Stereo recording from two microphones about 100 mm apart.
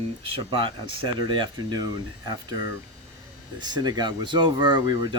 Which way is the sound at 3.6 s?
45° right (ahead or behind).